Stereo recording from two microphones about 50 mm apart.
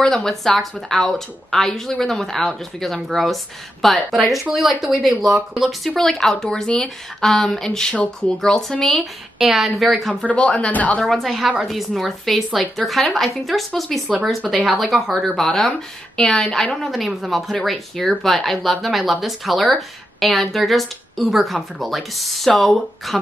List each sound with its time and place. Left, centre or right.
0.0 s speech: centre
7.9 s speech: left
8.4 s speech: centre
10.2 s speech: left
11.0 s speech: centre
16.8 s speech: centre